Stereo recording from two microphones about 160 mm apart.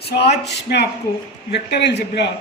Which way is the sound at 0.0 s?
90° left.